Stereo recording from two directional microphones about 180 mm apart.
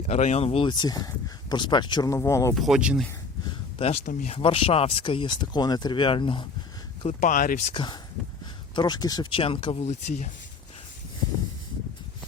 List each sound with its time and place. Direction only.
0.1 s speech: 40° left (ahead or behind); by 2.6 s 15° left (ahead or behind)
2.6 s speech: centre (ahead or behind)
3.4 s a sound: 30° left (ahead or behind)
4.0 s speech: 45° left (ahead or behind)
4.4 s speech: 30° left (ahead or behind)
7.0 s speech: 40° left (ahead or behind)
7.7 s speech: 25° left (ahead or behind)